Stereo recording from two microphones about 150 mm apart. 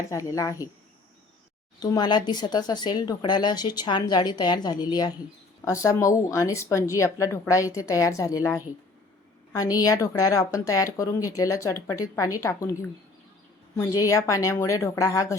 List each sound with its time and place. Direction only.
0.3 s a woman's voice: 20° left (ahead or behind)
1.8 s a woman's voice: 25° left (ahead or behind)